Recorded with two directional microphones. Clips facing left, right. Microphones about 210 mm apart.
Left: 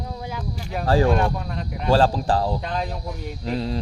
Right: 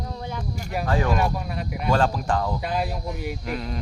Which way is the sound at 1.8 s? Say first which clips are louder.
Left 4 dB; 30° left (ahead or behind).